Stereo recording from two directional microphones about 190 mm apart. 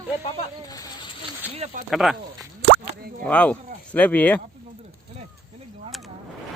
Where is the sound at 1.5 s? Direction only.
40° right (ahead or behind).